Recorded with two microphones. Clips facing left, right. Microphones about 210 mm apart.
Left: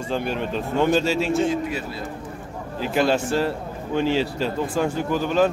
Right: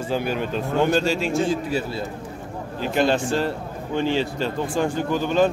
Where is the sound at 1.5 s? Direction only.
30° right (ahead or behind).